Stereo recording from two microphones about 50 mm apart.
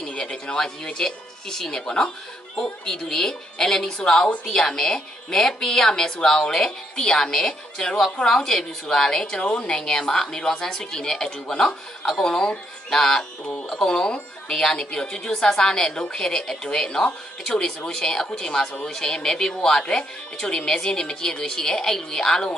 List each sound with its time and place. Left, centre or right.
0.0 s speech: centre